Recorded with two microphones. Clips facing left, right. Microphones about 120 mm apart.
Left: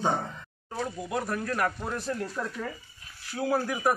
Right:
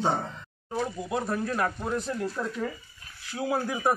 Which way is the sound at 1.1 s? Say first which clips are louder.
Right 2 dB; 25° right (ahead or behind).